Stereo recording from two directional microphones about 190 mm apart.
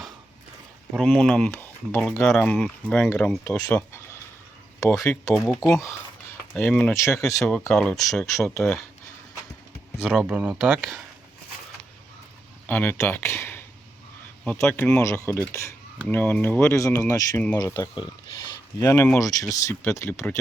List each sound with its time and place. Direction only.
0.9 s speech: 5° left (ahead or behind)
3.7 s a sound: 15° left (ahead or behind)
4.9 s speech: centre (ahead or behind)
5.6 s speech: 15° left (ahead or behind)
10.0 s speech: 5° right (ahead or behind)
10.8 s speech: centre (ahead or behind)
12.6 s speech: 10° left (ahead or behind)